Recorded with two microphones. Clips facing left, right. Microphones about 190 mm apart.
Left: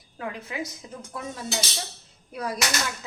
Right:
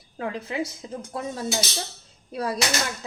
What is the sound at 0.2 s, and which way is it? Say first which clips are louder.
Speech: right 4 dB; 30° right (ahead or behind).